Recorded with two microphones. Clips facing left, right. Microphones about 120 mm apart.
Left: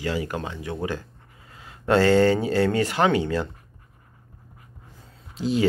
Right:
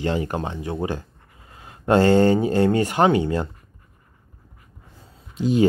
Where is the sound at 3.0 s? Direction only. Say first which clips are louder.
Right 3 dB; 15° right (ahead or behind).